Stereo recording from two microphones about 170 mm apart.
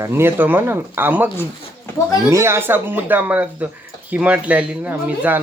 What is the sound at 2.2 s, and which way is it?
Speech, 15° right (ahead or behind).